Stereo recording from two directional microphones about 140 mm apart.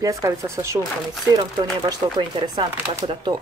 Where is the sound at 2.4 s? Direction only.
35° right (ahead or behind).